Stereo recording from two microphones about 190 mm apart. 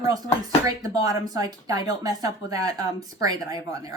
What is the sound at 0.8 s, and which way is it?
A woman's voice, 20° right (ahead or behind).